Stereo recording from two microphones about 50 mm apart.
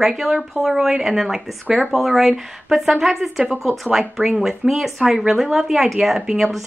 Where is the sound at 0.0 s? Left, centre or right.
Centre.